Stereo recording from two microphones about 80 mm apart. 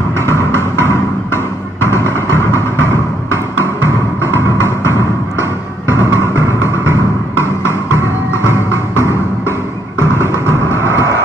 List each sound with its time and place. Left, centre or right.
0.2 s music: left
10.7 s vehicle: left